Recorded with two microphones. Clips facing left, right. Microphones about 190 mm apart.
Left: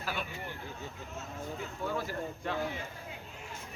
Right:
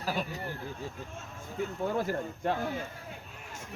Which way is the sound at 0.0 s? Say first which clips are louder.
Right 4 dB; 40° right (ahead or behind).